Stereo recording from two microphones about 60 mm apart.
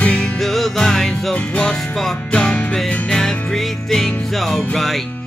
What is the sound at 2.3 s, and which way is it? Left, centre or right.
Music, centre.